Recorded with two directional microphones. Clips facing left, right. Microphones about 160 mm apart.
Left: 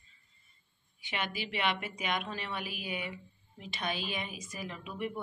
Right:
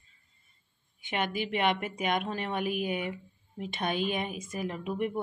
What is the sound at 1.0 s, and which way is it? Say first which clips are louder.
A woman's voice: right 6 dB; 50° right (ahead or behind).